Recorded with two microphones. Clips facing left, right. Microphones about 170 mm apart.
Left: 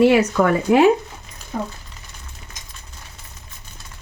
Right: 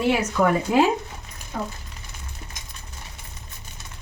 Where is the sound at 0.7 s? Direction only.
65° left (ahead or behind).